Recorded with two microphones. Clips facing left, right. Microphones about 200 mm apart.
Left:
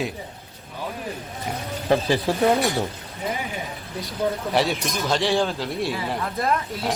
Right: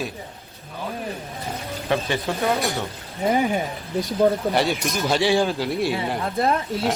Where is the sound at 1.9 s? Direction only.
35° left (ahead or behind).